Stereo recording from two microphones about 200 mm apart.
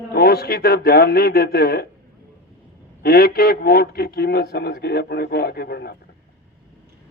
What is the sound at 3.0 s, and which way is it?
Speech, 50° left (ahead or behind).